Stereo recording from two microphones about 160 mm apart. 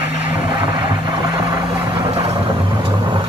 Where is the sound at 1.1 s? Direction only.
25° right (ahead or behind).